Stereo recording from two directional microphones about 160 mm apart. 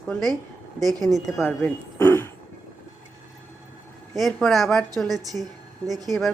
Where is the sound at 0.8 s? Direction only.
25° right (ahead or behind).